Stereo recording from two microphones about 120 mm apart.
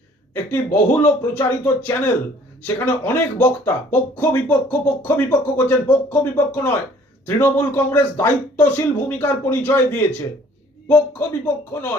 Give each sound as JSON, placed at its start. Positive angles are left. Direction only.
{"t": 0.3, "sound": "speech", "side_deg": 20}